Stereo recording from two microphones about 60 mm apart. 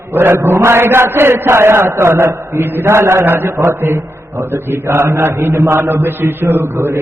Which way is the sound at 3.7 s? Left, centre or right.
Right.